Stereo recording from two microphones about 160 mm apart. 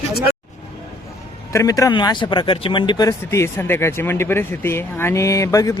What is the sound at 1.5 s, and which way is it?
Speech, 20° left (ahead or behind).